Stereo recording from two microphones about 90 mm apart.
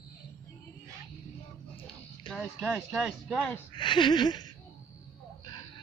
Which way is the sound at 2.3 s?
85° left.